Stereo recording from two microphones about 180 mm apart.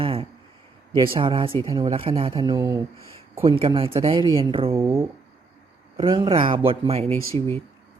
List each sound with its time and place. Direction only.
0.0 s a sound: 30° right (ahead or behind)
0.9 s speech: 25° right (ahead or behind)
2.4 s speech: 20° right (ahead or behind)
3.4 s speech: 30° right (ahead or behind)
4.8 s speech: 15° right (ahead or behind)
6.0 s speech: 30° right (ahead or behind)